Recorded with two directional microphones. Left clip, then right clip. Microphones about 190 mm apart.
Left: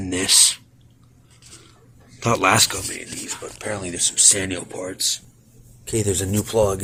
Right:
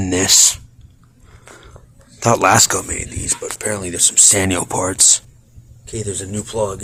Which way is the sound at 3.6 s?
45° right (ahead or behind).